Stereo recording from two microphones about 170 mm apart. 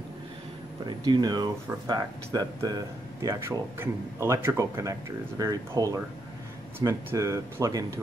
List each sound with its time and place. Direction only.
0.8 s speech: 25° right (ahead or behind)